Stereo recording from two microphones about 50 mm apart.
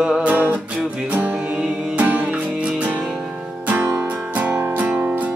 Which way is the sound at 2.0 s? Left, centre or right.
Right.